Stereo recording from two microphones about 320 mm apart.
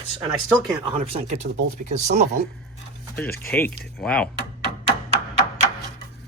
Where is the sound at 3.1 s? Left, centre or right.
Centre.